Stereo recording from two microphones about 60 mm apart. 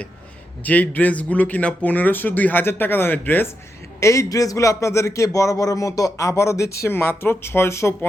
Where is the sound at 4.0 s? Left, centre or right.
Left.